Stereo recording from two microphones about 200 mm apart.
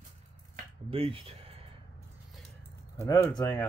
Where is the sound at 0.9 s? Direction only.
30° right (ahead or behind).